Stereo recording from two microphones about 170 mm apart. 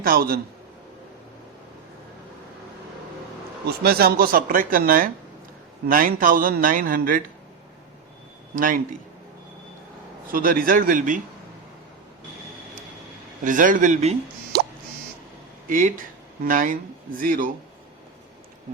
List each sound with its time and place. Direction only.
0.0 s a man's voice: 60° right (ahead or behind)
3.8 s a man's voice: 65° right (ahead or behind)
8.5 s speech: 55° right (ahead or behind)
10.2 s a man's voice: 55° right (ahead or behind)
13.4 s speech: 50° right (ahead or behind)
14.5 s a sound: 70° right (ahead or behind)
15.6 s speech: 50° right (ahead or behind)